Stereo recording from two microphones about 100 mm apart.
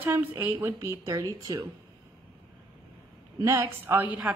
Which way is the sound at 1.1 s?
35° right (ahead or behind).